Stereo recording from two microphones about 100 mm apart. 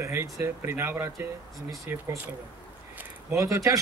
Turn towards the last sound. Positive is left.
turn(degrees=-30)  # may be behind; listen again after turning